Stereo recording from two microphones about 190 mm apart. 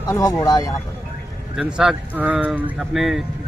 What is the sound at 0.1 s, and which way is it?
Speech, 15° left (ahead or behind).